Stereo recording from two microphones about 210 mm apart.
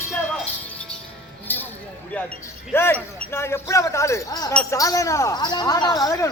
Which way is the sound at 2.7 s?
10° left (ahead or behind).